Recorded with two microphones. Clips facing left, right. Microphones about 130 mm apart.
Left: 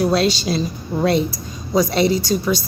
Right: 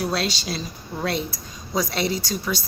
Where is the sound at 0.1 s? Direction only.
30° left (ahead or behind).